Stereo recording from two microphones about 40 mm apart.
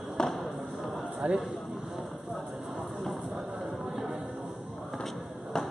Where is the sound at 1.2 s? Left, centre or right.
Right.